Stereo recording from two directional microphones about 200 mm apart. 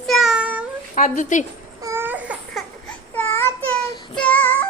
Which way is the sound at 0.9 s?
40° left (ahead or behind).